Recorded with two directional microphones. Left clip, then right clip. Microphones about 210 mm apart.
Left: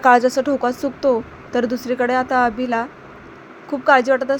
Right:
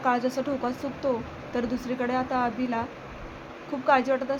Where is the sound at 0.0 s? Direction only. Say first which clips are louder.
Left 12 dB; 35° left (ahead or behind).